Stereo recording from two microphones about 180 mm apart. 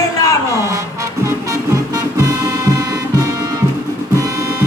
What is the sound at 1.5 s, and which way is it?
Music, 15° right (ahead or behind).